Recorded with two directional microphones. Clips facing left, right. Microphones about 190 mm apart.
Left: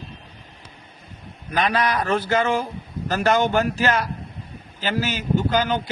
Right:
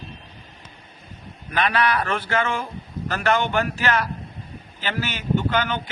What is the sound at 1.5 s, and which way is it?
A man's voice, 40° left (ahead or behind).